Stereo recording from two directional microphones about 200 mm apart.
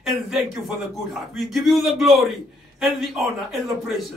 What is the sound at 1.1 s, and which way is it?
Speech, centre (ahead or behind).